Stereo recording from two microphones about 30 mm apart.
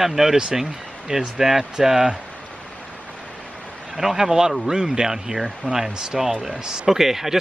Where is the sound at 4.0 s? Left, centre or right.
Centre.